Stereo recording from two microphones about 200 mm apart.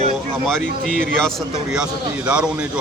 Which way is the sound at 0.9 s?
5° left (ahead or behind).